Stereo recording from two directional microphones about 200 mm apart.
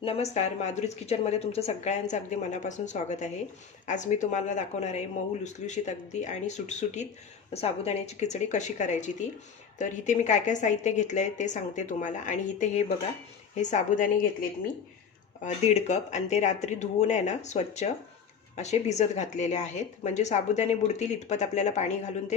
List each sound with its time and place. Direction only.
0.0 s speech: 30° left (ahead or behind)
15.4 s speech: 35° left (ahead or behind)